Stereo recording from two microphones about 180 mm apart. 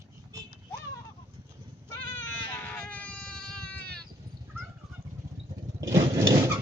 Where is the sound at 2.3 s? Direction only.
10° left (ahead or behind).